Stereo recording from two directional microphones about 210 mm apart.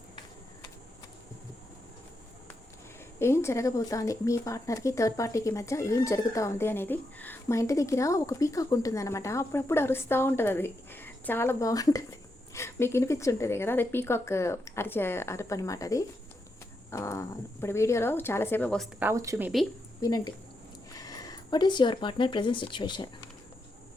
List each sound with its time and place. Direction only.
3.2 s speech: 10° left (ahead or behind)
18.9 s speech: 10° right (ahead or behind)
20.0 s speech: 15° left (ahead or behind)